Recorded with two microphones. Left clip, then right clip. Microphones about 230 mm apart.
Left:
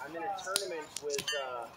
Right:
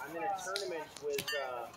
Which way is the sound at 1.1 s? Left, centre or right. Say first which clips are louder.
Left 2 dB; centre.